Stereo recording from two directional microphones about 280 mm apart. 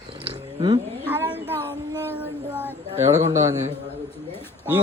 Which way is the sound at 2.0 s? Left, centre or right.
Centre.